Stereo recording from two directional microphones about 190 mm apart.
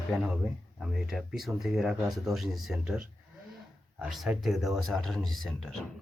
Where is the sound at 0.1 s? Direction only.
Centre (ahead or behind).